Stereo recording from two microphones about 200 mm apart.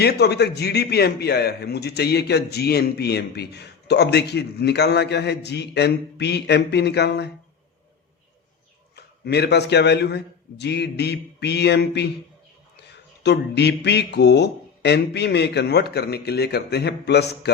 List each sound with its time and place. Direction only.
0.0 s a man's voice: 55° left (ahead or behind)
9.0 s a man's voice: 55° left (ahead or behind)
13.2 s a man's voice: 60° left (ahead or behind)